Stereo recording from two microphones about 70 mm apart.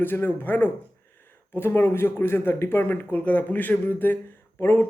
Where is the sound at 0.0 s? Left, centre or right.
Left.